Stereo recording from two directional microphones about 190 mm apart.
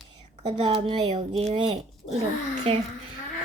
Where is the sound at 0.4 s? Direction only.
30° right (ahead or behind).